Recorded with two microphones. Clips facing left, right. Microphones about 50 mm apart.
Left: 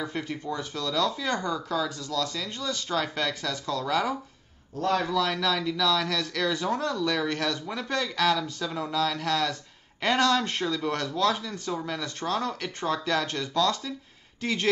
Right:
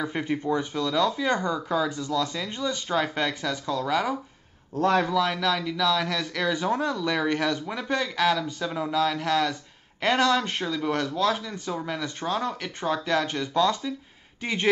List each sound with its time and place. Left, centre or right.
0.0 s speech: right
4.7 s a man's voice: right
5.1 s speech: centre